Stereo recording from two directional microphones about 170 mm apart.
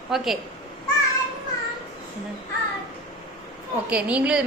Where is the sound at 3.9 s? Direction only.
5° right (ahead or behind).